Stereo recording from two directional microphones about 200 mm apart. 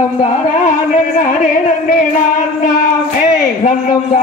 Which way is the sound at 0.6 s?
40° left (ahead or behind).